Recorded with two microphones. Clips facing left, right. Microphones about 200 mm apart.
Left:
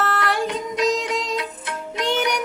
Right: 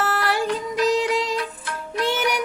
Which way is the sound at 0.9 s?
Centre (ahead or behind).